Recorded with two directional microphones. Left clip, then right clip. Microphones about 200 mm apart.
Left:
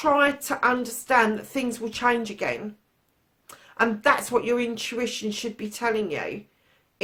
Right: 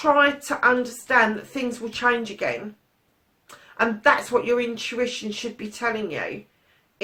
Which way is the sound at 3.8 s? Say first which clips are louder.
Right 2 dB; 50° left (ahead or behind).